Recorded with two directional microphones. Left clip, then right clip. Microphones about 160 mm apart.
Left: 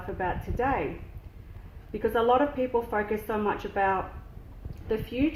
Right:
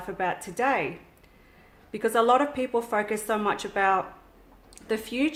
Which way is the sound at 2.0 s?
30° right (ahead or behind).